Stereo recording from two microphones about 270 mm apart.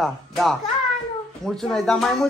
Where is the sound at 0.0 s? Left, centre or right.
Centre.